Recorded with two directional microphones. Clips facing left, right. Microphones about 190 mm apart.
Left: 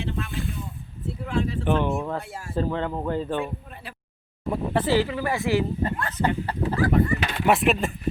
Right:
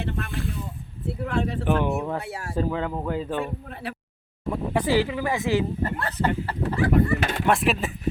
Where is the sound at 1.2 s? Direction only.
65° right (ahead or behind).